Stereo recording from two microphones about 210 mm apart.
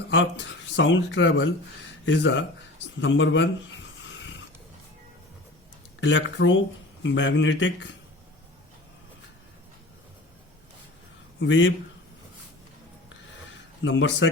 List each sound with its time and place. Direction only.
0.1 s speech: 60° left (ahead or behind)
6.0 s speech: 65° left (ahead or behind)
11.3 s a man's voice: 60° left (ahead or behind)
13.8 s speech: 60° left (ahead or behind)